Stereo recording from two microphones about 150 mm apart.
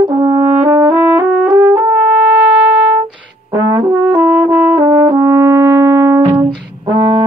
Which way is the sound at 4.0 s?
10° right (ahead or behind).